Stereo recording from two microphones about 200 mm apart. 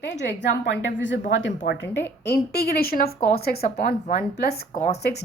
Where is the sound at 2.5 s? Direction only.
50° left (ahead or behind).